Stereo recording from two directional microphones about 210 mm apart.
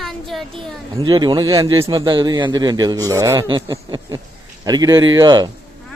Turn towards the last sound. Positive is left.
turn(degrees=-20)  # may be behind; listen again after turning